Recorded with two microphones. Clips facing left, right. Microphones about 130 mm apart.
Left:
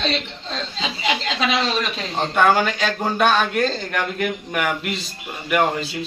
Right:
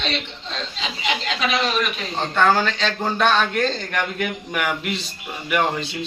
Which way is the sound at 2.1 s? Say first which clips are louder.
Left 1 dB; 10° left (ahead or behind).